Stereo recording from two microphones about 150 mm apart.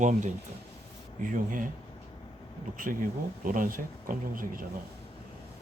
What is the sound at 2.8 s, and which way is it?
Speech, 65° right (ahead or behind).